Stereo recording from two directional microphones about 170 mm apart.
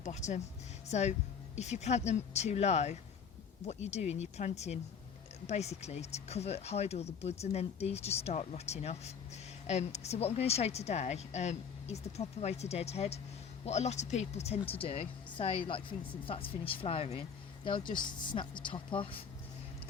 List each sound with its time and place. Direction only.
0.0 s speech: 45° left (ahead or behind)